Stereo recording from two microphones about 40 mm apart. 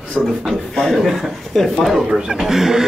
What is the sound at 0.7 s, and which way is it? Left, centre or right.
A woman's voice, centre.